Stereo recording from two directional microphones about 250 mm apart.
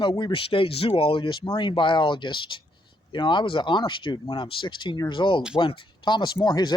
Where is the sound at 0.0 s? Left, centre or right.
Centre.